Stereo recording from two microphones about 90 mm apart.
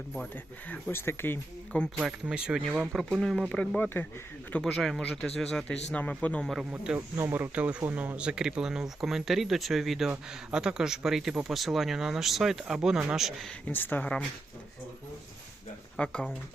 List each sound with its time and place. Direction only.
0.7 s speech: 25° left (ahead or behind)
2.2 s speech: 10° right (ahead or behind)
2.9 s speech: centre (ahead or behind)
3.5 s speech: 10° left (ahead or behind)
3.8 s speech: 25° left (ahead or behind)
4.5 s speech: 5° left (ahead or behind)
6.7 s speech: 15° right (ahead or behind)
13.7 s speech: 20° left (ahead or behind)
16.0 s speech: 10° left (ahead or behind)